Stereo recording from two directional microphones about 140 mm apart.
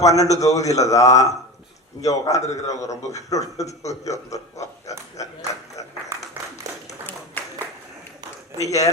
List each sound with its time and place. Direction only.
0.0 s a man's voice: 25° left (ahead or behind)
8.5 s a man's voice: 25° left (ahead or behind)